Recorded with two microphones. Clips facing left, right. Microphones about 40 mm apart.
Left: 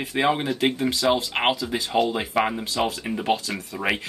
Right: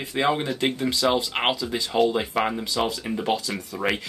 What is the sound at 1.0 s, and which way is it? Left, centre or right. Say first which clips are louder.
Speech: left 1 dB; centre.